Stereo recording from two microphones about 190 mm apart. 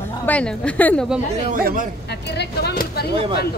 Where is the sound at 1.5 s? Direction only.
45° right (ahead or behind).